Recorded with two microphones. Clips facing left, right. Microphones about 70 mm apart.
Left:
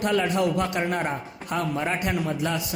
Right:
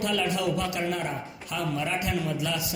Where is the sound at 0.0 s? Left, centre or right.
Left.